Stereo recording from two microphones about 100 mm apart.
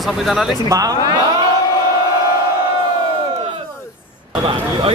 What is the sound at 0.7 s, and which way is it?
Speech, 35° right (ahead or behind).